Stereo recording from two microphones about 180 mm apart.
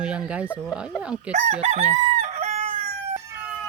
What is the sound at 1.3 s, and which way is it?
Chicken, 40° right (ahead or behind).